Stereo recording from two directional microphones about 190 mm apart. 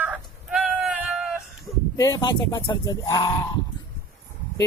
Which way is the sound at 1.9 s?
20° left (ahead or behind).